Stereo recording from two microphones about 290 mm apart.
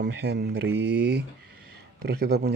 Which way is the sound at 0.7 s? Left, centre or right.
Right.